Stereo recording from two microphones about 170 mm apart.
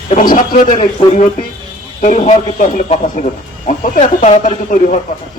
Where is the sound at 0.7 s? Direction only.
35° left (ahead or behind).